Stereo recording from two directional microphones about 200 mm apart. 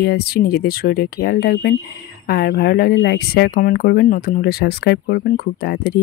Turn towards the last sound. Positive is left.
turn(degrees=50)  # may be behind; listen again after turning